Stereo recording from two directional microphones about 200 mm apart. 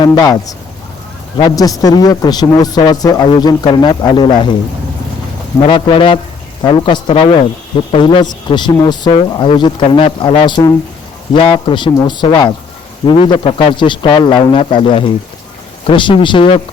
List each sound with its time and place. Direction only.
0.0 s a man's voice: 20° left (ahead or behind)
5.6 s a man's voice: 25° left (ahead or behind)